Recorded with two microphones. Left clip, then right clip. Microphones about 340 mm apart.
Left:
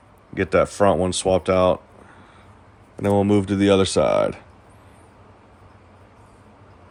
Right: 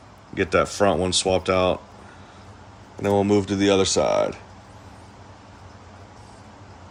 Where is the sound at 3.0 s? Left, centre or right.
Centre.